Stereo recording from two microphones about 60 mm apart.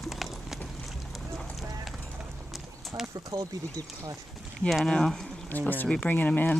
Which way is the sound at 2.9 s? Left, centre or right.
Right.